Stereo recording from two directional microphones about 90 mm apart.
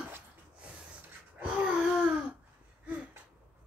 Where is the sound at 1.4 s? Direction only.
15° right (ahead or behind).